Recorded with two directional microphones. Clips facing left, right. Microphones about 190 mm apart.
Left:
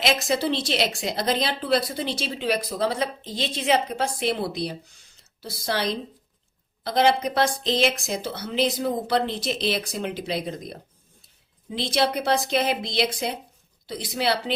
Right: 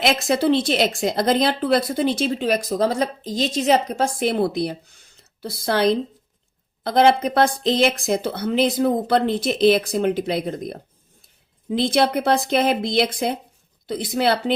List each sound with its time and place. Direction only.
0.0 s speech: 55° right (ahead or behind)